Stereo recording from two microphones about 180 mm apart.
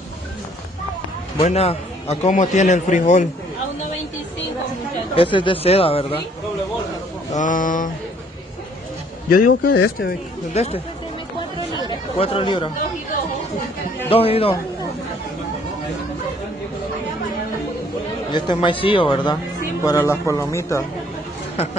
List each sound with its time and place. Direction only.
1.4 s a man's voice: 35° left (ahead or behind)
5.1 s a man's voice: 30° left (ahead or behind)
7.3 s speech: 45° left (ahead or behind)
9.3 s speech: 50° left (ahead or behind)
10.5 s a man's voice: 35° left (ahead or behind)
11.9 s speech: 30° left (ahead or behind)
14.1 s a man's voice: 30° left (ahead or behind)
18.3 s speech: 30° left (ahead or behind)
19.8 s speech: 15° left (ahead or behind)